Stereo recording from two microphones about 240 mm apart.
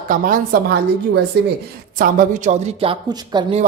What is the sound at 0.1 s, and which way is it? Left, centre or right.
Speech, right.